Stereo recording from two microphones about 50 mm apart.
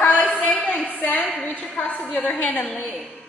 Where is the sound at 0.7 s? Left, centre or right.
Left.